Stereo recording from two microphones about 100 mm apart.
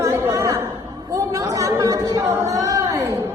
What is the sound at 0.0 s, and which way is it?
Chatter, 30° right (ahead or behind).